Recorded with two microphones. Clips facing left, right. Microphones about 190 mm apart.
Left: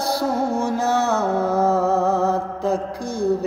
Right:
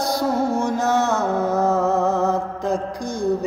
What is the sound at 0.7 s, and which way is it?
Mantra, centre (ahead or behind).